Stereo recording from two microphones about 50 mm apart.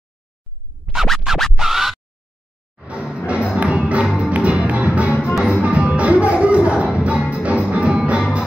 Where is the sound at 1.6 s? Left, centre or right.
Centre.